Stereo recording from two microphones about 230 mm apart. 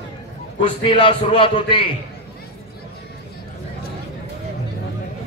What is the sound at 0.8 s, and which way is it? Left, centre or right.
Speech, left.